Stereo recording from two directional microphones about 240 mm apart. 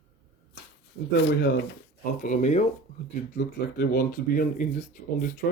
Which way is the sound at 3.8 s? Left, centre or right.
Left.